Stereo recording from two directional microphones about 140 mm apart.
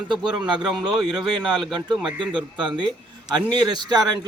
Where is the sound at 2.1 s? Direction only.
35° right (ahead or behind).